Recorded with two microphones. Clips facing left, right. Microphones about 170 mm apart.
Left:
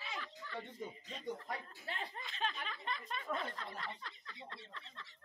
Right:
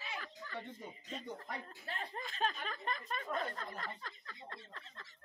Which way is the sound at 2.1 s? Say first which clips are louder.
Right 7 dB; 45° right (ahead or behind).